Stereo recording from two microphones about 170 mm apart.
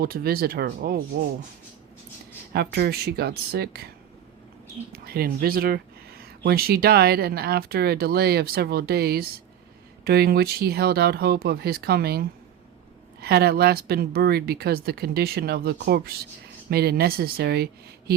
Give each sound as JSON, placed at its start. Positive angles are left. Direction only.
{"t": 0.0, "sound": "speech", "side_deg": -65}
{"t": 2.5, "sound": "speech", "side_deg": -70}
{"t": 4.9, "sound": "speech", "side_deg": -60}